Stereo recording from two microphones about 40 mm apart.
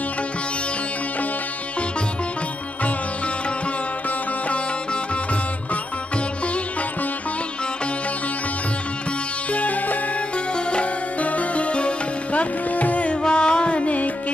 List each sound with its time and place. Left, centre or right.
9.5 s music: left
10.3 s music: left
13.2 s music: left